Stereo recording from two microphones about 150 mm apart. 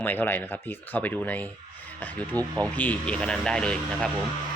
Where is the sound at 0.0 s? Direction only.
10° left (ahead or behind).